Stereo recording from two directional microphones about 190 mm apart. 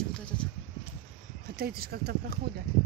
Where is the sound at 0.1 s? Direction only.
5° left (ahead or behind).